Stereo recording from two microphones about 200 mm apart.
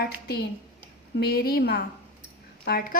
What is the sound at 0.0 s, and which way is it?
Speech, 55° left (ahead or behind).